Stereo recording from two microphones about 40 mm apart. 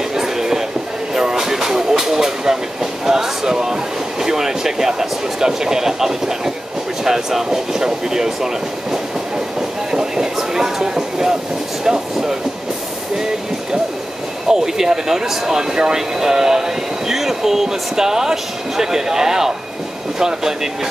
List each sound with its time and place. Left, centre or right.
0.1 s a sound: centre
1.1 s train: centre
7.1 s speech: centre
9.8 s a sound: centre
11.8 s train: centre
14.5 s speech: centre